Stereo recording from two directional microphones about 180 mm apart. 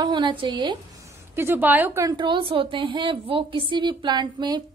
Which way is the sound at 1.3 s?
10° right (ahead or behind).